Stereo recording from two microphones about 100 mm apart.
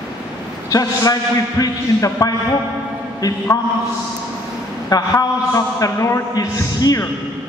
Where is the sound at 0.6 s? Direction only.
40° left (ahead or behind).